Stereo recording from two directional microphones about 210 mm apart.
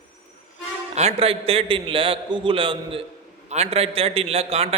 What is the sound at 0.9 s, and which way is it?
A man's voice, 30° right (ahead or behind).